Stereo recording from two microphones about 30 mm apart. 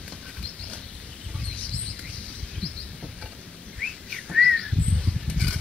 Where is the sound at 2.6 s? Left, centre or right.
Left.